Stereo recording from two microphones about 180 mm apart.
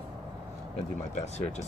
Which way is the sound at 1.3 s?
40° left (ahead or behind).